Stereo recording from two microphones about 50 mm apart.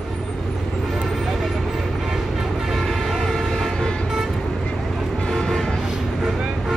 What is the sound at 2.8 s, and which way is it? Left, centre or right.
Vehicle, centre.